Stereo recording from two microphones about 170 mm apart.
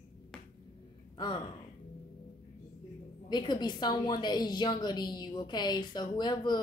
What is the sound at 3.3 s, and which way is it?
A woman's voice, 25° left (ahead or behind).